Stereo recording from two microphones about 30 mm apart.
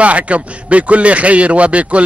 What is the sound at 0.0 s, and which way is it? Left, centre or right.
A man's voice, right.